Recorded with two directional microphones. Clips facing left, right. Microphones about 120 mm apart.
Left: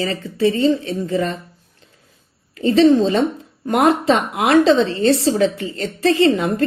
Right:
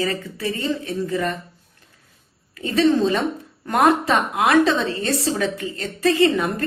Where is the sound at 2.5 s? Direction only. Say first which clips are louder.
Left 5 dB; 30° left (ahead or behind).